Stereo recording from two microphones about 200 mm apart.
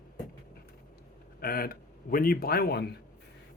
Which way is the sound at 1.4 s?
50° left (ahead or behind).